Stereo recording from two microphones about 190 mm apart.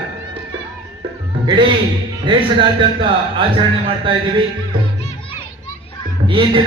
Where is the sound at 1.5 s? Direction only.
25° right (ahead or behind).